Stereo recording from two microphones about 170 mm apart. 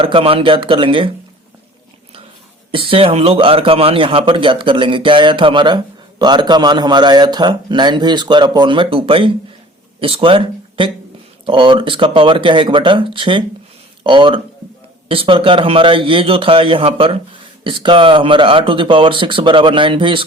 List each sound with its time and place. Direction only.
0.0 s speech: 30° right (ahead or behind)
2.7 s a man's voice: 30° right (ahead or behind)